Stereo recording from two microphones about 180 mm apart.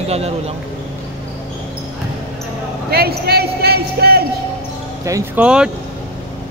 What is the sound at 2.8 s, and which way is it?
A man's voice, 60° right (ahead or behind).